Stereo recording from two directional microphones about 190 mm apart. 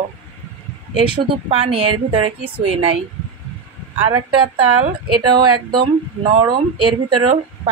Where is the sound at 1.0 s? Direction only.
25° right (ahead or behind).